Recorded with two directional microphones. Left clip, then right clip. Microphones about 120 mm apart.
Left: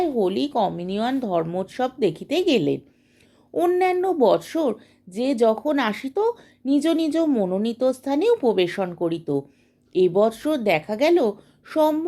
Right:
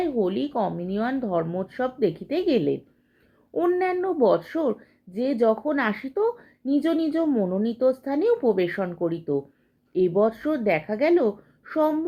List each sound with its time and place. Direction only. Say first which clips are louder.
0.0 s a woman's voice: left 3 dB; 35° left (ahead or behind)
3.5 s a woman's voice: left 3 dB; 30° left (ahead or behind)